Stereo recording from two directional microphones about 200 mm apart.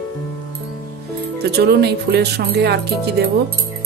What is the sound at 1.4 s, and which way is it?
Speech, 55° right (ahead or behind).